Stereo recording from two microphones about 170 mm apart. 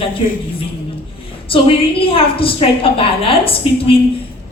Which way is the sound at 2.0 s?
35° left (ahead or behind).